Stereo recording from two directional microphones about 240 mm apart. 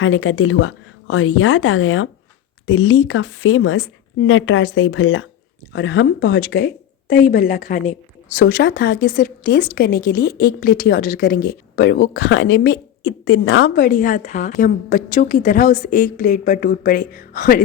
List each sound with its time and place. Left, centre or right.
0.0 s speech: left
7.1 s a woman's voice: left